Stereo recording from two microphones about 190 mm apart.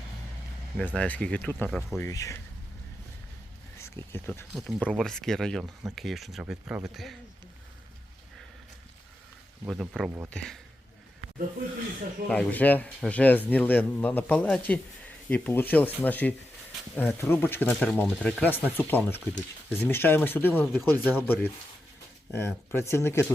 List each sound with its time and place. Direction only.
0.8 s speech: 10° left (ahead or behind)
2.0 s speech: 15° left (ahead or behind)
3.8 s speech: 15° left (ahead or behind)
9.6 s speech: centre (ahead or behind)
12.3 s speech: 10° left (ahead or behind)